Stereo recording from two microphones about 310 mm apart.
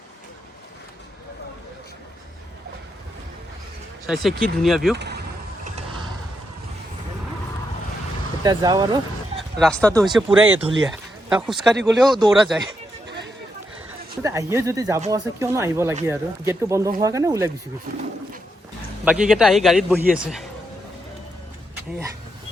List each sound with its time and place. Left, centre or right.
4.0 s speech: centre
4.9 s vehicle: right
8.4 s speech: centre
9.6 s speech: centre
14.2 s speech: centre
19.0 s speech: centre